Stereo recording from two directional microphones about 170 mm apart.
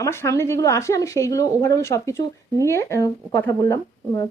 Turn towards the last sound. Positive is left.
turn(degrees=20)  # may be behind; listen again after turning